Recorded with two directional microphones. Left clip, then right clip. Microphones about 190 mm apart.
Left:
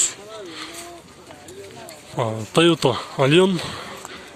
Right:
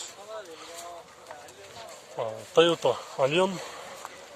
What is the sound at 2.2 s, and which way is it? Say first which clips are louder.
Speech: left 4 dB; 15° left (ahead or behind).